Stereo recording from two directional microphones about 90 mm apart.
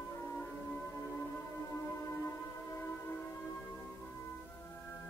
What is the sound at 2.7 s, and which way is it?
Music, 25° left (ahead or behind).